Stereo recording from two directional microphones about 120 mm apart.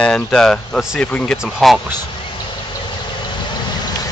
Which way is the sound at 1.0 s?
10° left (ahead or behind).